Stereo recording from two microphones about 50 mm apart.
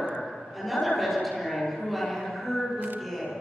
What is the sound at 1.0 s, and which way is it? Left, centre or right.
A woman's voice, centre.